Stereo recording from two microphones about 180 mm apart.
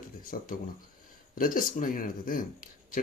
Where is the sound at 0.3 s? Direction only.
50° left (ahead or behind).